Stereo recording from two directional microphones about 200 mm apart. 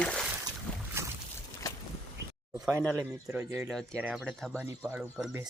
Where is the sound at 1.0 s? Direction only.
10° right (ahead or behind).